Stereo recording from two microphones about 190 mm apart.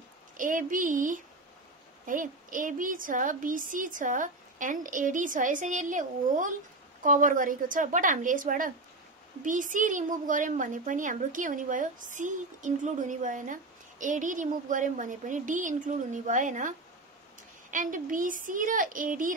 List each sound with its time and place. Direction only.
0.4 s a woman's voice: 45° right (ahead or behind)